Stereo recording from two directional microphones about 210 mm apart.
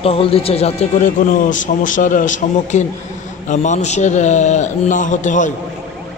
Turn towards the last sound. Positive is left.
turn(degrees=35)  # may be behind; listen again after turning